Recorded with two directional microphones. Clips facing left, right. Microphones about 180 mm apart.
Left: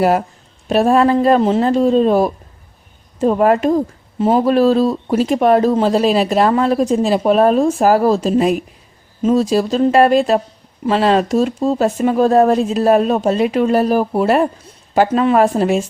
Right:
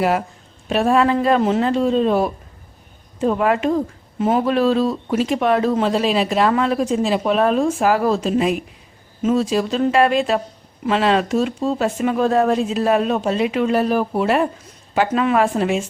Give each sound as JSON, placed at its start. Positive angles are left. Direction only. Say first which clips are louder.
{"t": 0.0, "sound": "speech", "louder": "left 4 dB", "side_deg": 40}